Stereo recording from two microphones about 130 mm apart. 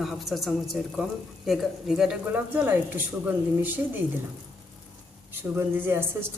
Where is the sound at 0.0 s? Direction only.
Centre (ahead or behind).